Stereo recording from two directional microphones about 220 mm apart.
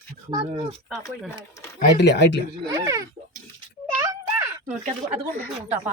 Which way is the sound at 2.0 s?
50° left (ahead or behind).